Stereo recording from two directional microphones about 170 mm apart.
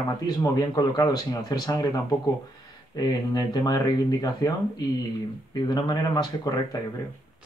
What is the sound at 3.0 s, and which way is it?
A man's voice, 25° left (ahead or behind).